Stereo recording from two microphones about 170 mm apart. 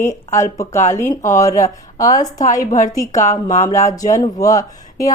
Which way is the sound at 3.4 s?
45° left (ahead or behind).